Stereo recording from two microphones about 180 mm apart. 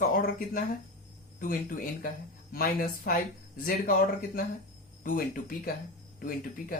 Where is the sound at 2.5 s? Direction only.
55° left (ahead or behind).